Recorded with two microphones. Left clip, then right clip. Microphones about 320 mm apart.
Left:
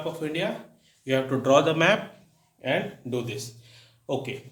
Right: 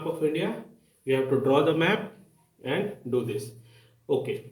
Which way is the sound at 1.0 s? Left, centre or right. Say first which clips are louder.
Right 1 dB; left.